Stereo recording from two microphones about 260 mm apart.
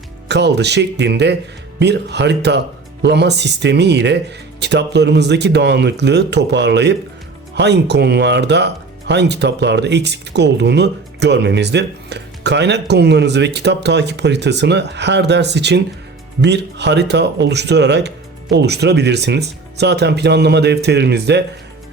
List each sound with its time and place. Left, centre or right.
0.3 s speech: right